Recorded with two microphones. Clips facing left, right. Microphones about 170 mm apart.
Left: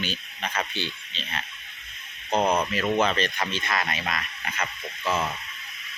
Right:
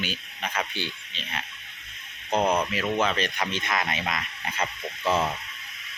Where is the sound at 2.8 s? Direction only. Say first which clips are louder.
Left 2 dB; 5° right (ahead or behind); by 5.2 s 30° right (ahead or behind).